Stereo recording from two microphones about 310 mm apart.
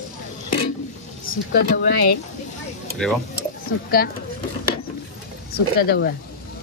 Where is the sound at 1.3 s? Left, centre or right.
Left.